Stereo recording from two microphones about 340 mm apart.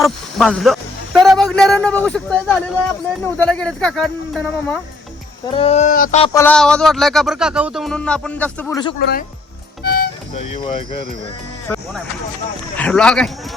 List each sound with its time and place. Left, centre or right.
0.0 s speech: centre
5.5 s speech: centre
9.0 s speech: left
10.3 s speech: centre
12.7 s speech: centre